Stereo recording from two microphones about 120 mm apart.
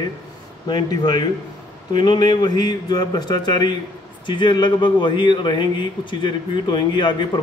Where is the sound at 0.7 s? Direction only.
35° left (ahead or behind).